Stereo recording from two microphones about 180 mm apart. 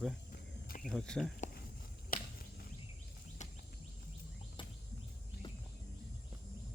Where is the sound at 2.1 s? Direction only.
55° left (ahead or behind).